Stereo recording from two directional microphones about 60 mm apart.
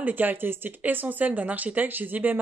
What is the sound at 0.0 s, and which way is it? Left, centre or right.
Speech, right.